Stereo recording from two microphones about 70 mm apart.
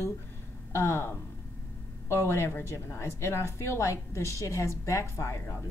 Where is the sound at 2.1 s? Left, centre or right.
Left.